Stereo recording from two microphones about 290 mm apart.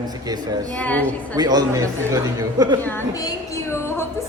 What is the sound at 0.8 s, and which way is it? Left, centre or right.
Speech, centre.